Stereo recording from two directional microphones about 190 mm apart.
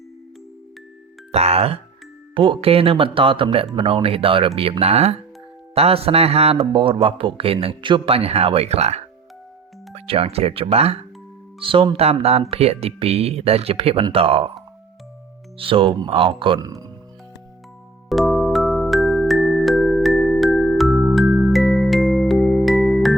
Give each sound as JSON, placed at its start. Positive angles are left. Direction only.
{"t": 1.3, "sound": "speech", "side_deg": -35}
{"t": 15.5, "sound": "speech", "side_deg": -30}
{"t": 18.1, "sound": "music", "side_deg": 0}